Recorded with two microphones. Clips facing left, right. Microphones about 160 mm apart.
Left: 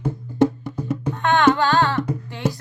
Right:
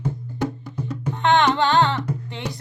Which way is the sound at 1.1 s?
20° right (ahead or behind).